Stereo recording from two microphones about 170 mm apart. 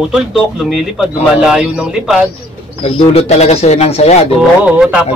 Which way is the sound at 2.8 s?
35° left (ahead or behind).